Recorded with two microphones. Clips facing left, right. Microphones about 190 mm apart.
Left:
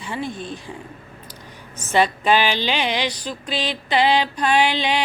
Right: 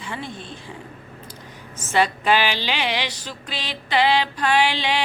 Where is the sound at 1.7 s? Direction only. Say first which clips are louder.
Left 2 dB; 15° left (ahead or behind).